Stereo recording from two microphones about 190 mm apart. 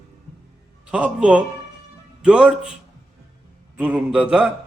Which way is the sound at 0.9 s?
5° right (ahead or behind).